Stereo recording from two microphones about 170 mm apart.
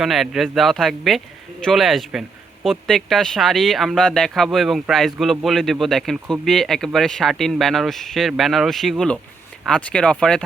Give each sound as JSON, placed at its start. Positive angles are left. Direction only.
{"t": 0.0, "sound": "speech", "side_deg": 0}